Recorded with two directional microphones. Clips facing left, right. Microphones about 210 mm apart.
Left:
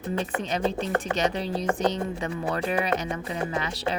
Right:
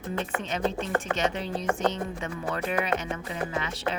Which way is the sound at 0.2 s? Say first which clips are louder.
Left 1 dB; 35° left (ahead or behind).